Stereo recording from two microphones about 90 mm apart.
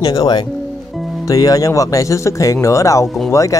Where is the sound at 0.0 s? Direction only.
45° left (ahead or behind).